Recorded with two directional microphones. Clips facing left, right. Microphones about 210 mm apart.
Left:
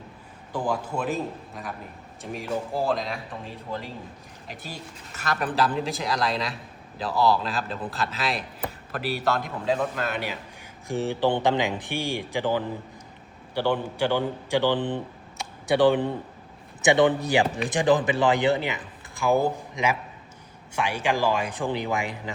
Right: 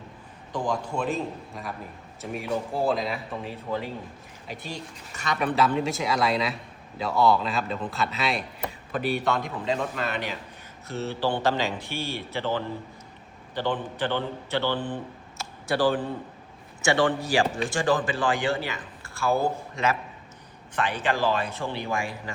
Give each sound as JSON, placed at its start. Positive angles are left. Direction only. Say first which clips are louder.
{"t": 0.5, "sound": "speech", "louder": "left 1 dB", "side_deg": 5}
{"t": 10.8, "sound": "speech", "louder": "left 4 dB", "side_deg": 15}
{"t": 15.4, "sound": "a sound", "louder": "left 4 dB", "side_deg": 20}
{"t": 16.8, "sound": "a man's voice", "louder": "left 3 dB", "side_deg": 20}